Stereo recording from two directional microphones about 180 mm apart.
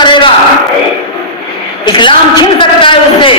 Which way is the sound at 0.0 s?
25° left (ahead or behind).